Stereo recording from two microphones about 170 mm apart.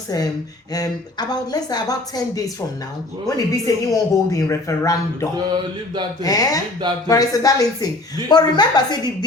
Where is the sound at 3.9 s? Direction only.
20° left (ahead or behind).